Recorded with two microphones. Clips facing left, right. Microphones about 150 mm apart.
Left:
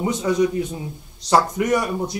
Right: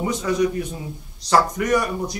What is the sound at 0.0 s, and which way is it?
A man's voice, 20° left (ahead or behind).